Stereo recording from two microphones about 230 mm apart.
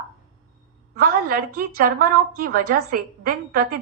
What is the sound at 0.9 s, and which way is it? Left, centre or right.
A woman's voice, right.